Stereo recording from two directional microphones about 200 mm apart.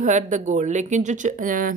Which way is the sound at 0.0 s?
40° right (ahead or behind).